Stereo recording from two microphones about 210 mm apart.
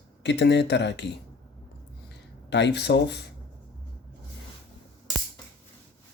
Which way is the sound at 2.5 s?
55° left (ahead or behind).